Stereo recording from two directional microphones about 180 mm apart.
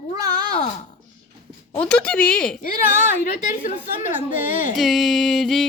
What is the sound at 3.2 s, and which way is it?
Speech, 45° left (ahead or behind).